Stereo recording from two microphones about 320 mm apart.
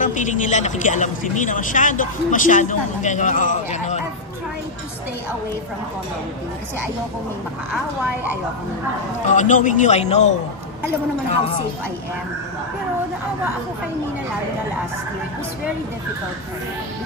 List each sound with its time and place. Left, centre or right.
0.0 s speech: left
9.3 s speech: left